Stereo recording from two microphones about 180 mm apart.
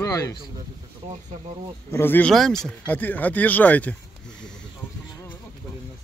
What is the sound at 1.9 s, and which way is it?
Speech, 10° left (ahead or behind).